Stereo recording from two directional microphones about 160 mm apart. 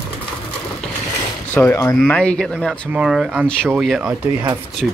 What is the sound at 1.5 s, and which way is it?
Speech, 15° left (ahead or behind).